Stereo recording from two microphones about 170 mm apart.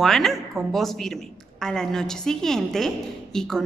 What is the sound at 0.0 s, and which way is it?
A woman's voice, centre (ahead or behind).